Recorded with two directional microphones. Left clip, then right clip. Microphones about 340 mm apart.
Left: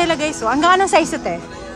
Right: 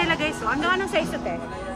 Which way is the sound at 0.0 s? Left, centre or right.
Centre.